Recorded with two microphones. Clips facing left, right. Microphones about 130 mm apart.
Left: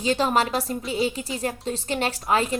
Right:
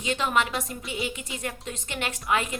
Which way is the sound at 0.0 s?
35° left (ahead or behind).